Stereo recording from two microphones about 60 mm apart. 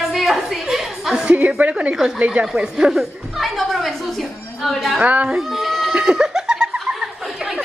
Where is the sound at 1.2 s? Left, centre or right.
Right.